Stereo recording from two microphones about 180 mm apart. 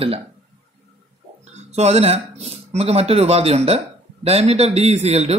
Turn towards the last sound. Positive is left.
turn(degrees=-35)  # may be behind; listen again after turning